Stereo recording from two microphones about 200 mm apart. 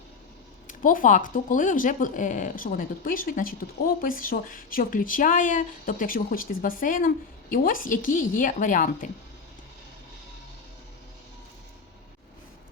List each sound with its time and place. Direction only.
0.7 s a woman's voice: 40° left (ahead or behind)